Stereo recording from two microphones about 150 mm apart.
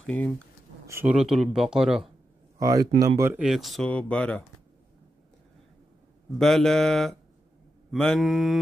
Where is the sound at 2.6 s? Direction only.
25° right (ahead or behind).